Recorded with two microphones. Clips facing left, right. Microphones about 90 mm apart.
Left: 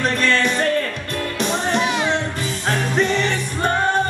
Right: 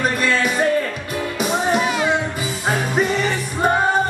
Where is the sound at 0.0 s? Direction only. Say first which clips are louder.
Even; 5° right (ahead or behind).